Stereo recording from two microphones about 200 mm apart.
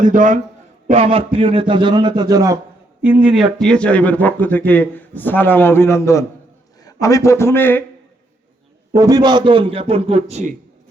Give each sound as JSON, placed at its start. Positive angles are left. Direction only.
{"t": 0.0, "sound": "a man's voice", "side_deg": -40}
{"t": 0.9, "sound": "a man's voice", "side_deg": -30}
{"t": 3.0, "sound": "speech", "side_deg": -5}
{"t": 9.0, "sound": "a man's voice", "side_deg": -20}